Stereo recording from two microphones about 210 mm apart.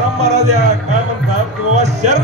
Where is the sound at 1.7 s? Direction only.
35° right (ahead or behind).